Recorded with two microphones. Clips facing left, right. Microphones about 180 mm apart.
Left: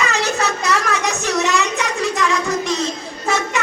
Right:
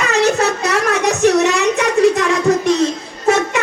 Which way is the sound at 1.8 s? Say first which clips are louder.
Right 8 dB; 55° right (ahead or behind).